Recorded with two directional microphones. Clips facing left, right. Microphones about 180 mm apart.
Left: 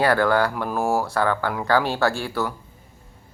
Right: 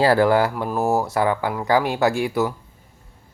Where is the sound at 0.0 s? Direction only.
25° right (ahead or behind).